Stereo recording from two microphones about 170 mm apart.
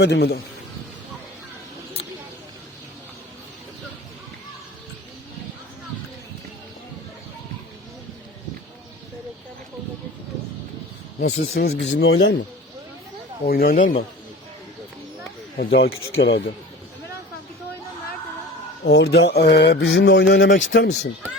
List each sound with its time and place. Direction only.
0.0 s speech: 90° left
11.2 s speech: 65° left (ahead or behind); by 12.4 s 85° left
13.4 s speech: 60° left (ahead or behind)
15.5 s speech: 80° left
18.9 s speech: 75° left (ahead or behind)